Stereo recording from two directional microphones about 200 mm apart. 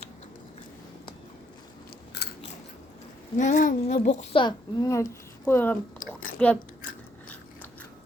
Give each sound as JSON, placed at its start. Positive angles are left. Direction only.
{"t": 3.3, "sound": "speech", "side_deg": 40}